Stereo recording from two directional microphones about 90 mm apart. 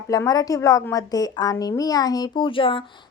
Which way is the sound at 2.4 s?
75° left (ahead or behind).